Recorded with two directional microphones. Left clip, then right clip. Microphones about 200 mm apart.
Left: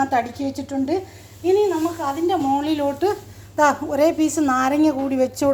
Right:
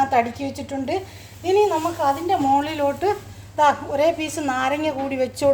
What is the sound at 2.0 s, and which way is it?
A woman's voice, centre (ahead or behind).